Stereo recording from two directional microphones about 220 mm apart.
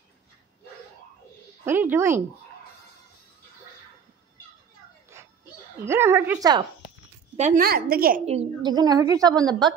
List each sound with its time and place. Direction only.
1.7 s a woman's voice: 10° right (ahead or behind)
5.1 s a sound: 10° right (ahead or behind)
5.9 s a woman's voice: 10° right (ahead or behind)
7.3 s a woman's voice: 35° right (ahead or behind)
8.3 s a woman's voice: 25° right (ahead or behind)